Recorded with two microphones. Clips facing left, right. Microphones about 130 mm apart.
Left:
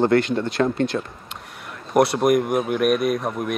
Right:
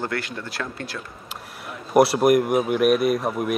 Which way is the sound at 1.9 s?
5° right (ahead or behind).